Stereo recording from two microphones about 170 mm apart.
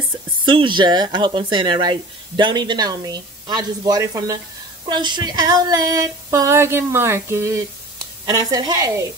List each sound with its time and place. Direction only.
0.5 s speech: 30° right (ahead or behind)